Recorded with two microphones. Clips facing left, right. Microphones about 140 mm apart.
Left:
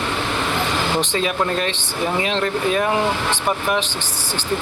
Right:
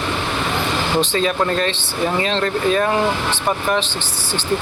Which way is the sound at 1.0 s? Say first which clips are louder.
Right 2 dB; 15° left (ahead or behind).